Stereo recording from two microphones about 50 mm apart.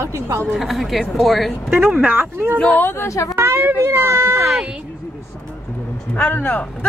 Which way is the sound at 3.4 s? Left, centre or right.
Right.